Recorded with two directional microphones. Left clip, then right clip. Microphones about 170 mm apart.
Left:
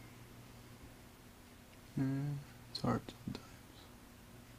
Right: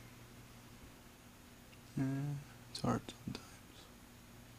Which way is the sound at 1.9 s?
10° right (ahead or behind).